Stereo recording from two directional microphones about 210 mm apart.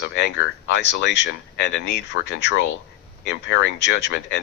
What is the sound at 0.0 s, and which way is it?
Speech, 55° left (ahead or behind).